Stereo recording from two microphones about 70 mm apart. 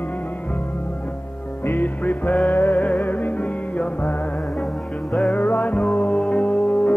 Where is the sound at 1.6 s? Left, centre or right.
Left.